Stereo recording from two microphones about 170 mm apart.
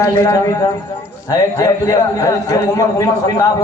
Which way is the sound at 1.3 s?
20° left (ahead or behind).